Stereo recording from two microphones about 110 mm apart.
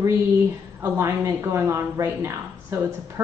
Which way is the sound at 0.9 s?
25° right (ahead or behind).